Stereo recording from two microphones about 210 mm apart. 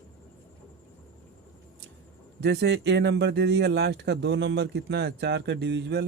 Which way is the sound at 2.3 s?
55° right (ahead or behind).